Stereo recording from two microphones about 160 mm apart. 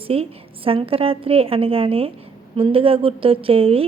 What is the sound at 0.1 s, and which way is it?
A woman's voice, 35° right (ahead or behind).